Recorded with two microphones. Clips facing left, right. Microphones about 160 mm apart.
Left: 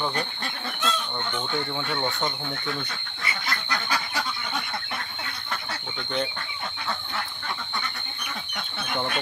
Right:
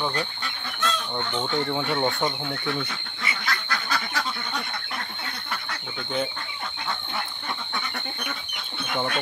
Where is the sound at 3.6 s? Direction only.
10° left (ahead or behind).